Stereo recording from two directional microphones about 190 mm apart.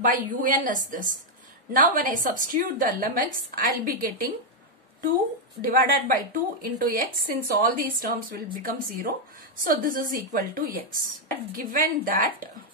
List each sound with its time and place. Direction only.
0.0 s a woman's voice: 45° right (ahead or behind)
5.6 s a woman's voice: 50° right (ahead or behind)